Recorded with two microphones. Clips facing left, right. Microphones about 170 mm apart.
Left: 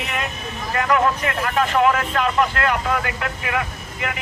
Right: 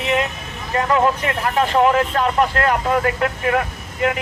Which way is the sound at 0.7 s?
25° right (ahead or behind).